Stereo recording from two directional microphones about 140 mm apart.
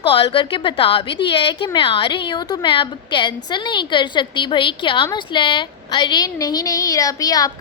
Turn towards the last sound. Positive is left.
turn(degrees=25)  # may be behind; listen again after turning